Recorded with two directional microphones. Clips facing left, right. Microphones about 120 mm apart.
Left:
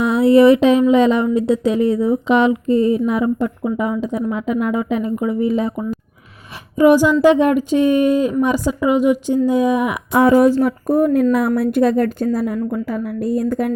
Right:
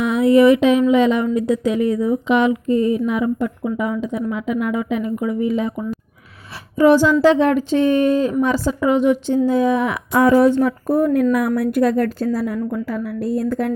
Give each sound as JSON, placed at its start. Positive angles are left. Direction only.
{"t": 0.0, "sound": "speech", "side_deg": 30}
{"t": 6.7, "sound": "a woman's voice", "side_deg": 15}